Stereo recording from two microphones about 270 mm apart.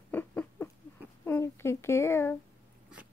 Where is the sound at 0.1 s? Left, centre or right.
Centre.